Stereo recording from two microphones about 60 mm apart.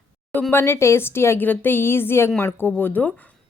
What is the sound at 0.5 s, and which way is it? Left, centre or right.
Speech, left.